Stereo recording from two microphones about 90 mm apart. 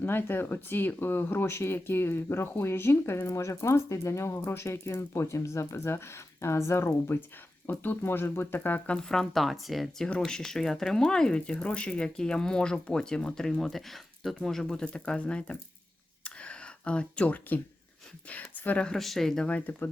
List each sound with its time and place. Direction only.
0.0 s speech: 25° left (ahead or behind)
9.0 s speech: 5° left (ahead or behind)
16.2 s a sound: 15° left (ahead or behind)
18.3 s speech: 20° left (ahead or behind)
18.9 s speech: 5° left (ahead or behind)
19.5 s speech: 20° left (ahead or behind)